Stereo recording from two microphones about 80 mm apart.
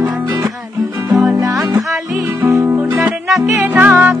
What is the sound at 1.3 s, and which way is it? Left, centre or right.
Music, right.